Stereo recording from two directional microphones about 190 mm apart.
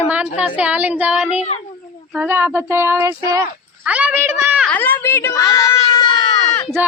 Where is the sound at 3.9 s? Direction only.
5° right (ahead or behind).